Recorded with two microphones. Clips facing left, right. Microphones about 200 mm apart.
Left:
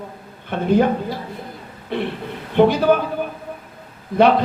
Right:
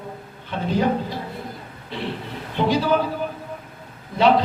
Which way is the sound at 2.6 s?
55° left (ahead or behind).